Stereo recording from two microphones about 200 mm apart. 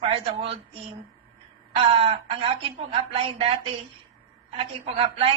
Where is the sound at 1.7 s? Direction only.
25° right (ahead or behind).